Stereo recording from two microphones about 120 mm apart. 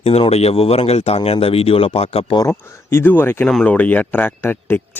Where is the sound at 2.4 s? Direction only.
25° left (ahead or behind).